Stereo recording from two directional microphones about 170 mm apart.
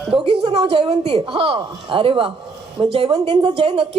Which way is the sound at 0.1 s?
30° right (ahead or behind).